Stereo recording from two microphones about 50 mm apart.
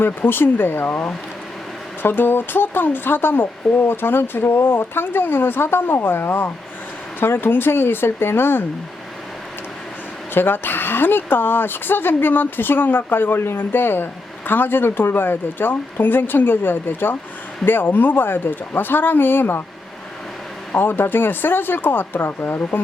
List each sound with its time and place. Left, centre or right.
0.0 s speech: left
10.3 s speech: left
20.7 s speech: left